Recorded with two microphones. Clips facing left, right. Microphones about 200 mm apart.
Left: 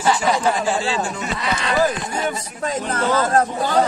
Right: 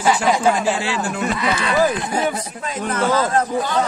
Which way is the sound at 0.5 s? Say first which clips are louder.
Right 1 dB; 65° right (ahead or behind).